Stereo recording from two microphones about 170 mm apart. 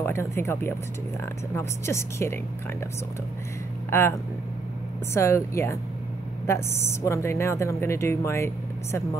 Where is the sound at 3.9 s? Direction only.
15° left (ahead or behind).